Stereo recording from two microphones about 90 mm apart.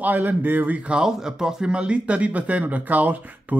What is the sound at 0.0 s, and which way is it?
A man's voice, 20° right (ahead or behind).